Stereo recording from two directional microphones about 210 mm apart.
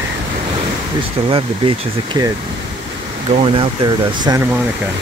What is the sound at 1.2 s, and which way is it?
Speech, 25° right (ahead or behind).